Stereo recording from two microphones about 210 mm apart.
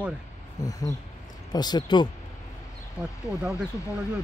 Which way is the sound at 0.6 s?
15° left (ahead or behind).